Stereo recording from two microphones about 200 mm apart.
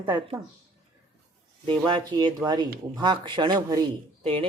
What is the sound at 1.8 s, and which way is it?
Speech, 20° right (ahead or behind).